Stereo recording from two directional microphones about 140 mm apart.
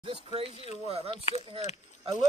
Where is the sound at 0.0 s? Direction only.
45° right (ahead or behind).